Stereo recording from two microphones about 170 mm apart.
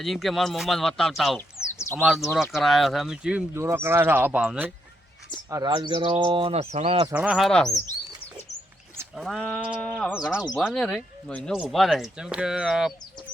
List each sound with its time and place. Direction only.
0.0 s speech: centre (ahead or behind)
1.6 s bird: 5° right (ahead or behind)
2.0 s speech: centre (ahead or behind)
3.5 s speech: 15° right (ahead or behind)
5.5 s bird: 20° right (ahead or behind)
7.1 s speech: 5° right (ahead or behind)
9.1 s speech: centre (ahead or behind)
9.8 s bird: 10° left (ahead or behind)
10.2 s speech: 5° right (ahead or behind)